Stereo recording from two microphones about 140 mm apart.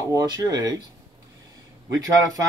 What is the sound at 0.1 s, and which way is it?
Speech, 25° right (ahead or behind).